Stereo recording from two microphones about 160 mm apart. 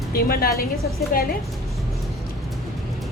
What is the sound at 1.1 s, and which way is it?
Speech, 60° left (ahead or behind).